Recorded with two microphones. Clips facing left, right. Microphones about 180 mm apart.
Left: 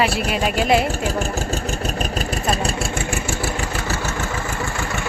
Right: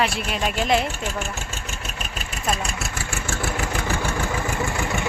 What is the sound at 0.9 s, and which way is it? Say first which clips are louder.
Vehicle: left 6 dB; 35° left (ahead or behind).